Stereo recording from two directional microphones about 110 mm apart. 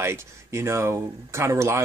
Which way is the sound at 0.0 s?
25° right (ahead or behind).